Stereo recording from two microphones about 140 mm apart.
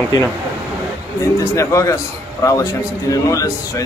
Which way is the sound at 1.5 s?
20° left (ahead or behind).